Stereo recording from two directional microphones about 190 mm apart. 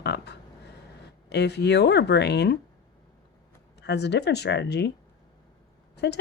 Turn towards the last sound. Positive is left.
turn(degrees=60)  # may be behind; listen again after turning